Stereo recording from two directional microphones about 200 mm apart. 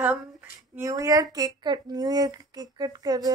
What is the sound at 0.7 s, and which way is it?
Speech, 15° right (ahead or behind).